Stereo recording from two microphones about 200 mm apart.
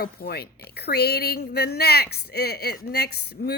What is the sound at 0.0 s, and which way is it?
Speech, 50° left (ahead or behind).